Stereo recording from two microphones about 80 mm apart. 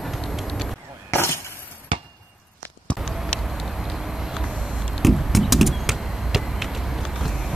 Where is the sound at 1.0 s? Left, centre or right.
Left.